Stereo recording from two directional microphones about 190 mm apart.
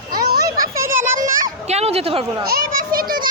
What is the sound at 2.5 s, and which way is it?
Children playing, 50° right (ahead or behind).